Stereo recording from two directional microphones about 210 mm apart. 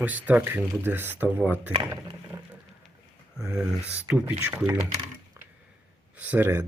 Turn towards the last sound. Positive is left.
turn(degrees=-10)  # may be behind; listen again after turning